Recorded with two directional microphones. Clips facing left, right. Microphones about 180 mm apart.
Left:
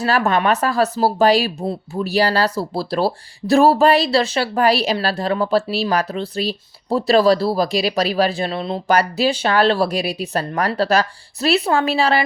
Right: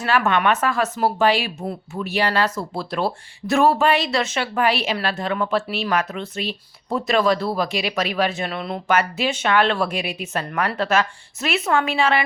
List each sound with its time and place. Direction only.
0.0 s speech: 35° left (ahead or behind)